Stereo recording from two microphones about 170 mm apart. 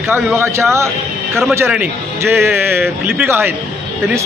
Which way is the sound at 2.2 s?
15° right (ahead or behind).